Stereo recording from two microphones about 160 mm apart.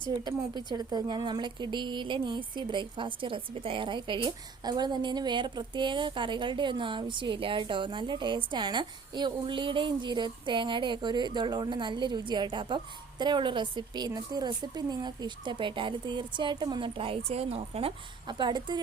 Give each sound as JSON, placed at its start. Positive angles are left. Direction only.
{"t": 0.3, "sound": "a woman's voice", "side_deg": -25}